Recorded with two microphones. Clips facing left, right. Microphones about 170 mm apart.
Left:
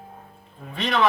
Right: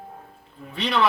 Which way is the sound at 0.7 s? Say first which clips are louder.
Even; 45° left (ahead or behind).